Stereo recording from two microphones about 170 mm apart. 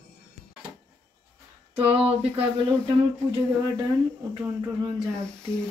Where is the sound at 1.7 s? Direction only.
35° right (ahead or behind).